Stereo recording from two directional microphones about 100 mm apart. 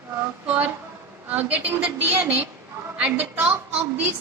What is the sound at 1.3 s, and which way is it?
A woman's voice, 15° right (ahead or behind).